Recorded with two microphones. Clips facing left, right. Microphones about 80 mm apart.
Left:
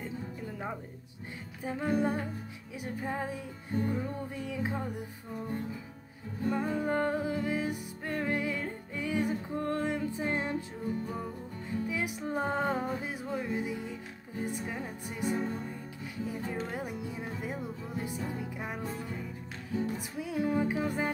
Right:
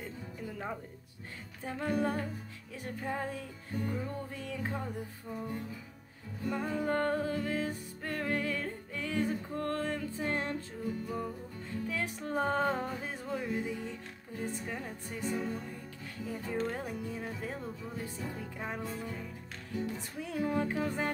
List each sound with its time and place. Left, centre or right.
1.6 s speech: centre
3.7 s speech: left
6.4 s music: left
11.7 s music: centre
14.7 s speech: centre
15.3 s music: left
16.3 s speech: centre